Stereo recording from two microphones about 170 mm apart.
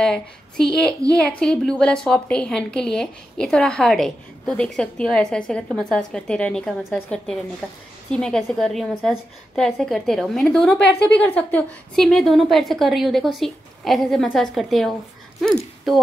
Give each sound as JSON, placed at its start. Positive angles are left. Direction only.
{"t": 0.0, "sound": "a woman's voice", "side_deg": 5}